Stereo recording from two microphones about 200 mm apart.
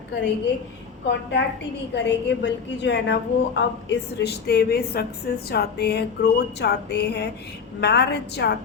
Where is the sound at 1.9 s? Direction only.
60° left (ahead or behind).